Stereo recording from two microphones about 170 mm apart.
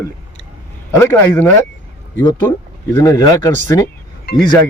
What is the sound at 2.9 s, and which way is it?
Speech, 20° left (ahead or behind).